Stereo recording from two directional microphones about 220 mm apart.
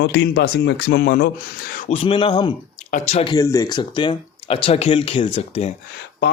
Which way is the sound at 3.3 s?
15° left (ahead or behind).